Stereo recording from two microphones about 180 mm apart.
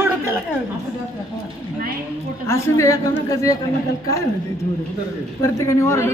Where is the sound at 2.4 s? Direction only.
15° left (ahead or behind).